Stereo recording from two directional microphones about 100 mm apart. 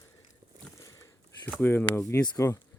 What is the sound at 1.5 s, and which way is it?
Speech, 20° left (ahead or behind).